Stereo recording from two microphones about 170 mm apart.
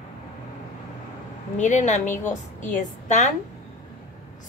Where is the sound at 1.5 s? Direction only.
45° left (ahead or behind).